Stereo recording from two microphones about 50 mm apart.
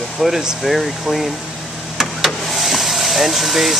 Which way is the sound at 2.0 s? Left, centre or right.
Centre.